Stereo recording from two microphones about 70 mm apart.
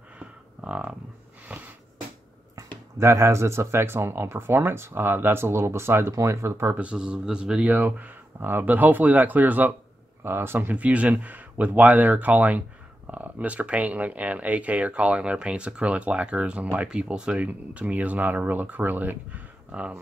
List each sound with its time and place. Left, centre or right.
0.2 s cattle: centre
1.5 s a sound: centre
3.0 s speech: right
6.8 s speech: centre
7.6 s speech: right
10.2 s speech: right
10.8 s speech: centre